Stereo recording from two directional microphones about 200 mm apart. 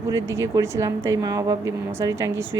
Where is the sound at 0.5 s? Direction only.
15° right (ahead or behind).